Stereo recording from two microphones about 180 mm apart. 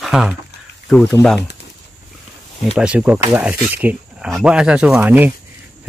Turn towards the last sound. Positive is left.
turn(degrees=-10)  # may be behind; listen again after turning